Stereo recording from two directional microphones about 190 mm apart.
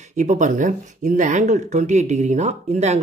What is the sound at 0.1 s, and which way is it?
Speech, 40° right (ahead or behind).